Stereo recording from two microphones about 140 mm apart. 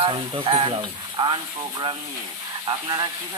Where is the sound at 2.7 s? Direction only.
30° right (ahead or behind).